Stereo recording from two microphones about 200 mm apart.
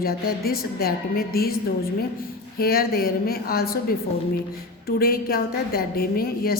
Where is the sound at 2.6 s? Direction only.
50° left (ahead or behind).